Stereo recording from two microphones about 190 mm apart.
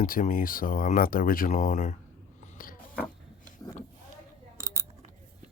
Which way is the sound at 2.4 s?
45° left (ahead or behind).